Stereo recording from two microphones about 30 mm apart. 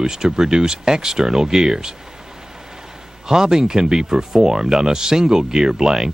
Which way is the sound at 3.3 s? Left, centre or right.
Right.